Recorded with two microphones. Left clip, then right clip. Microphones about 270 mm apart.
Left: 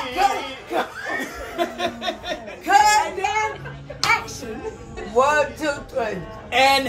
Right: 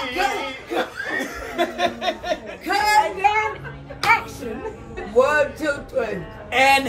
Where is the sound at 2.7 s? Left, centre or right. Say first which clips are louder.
Left 2 dB; centre.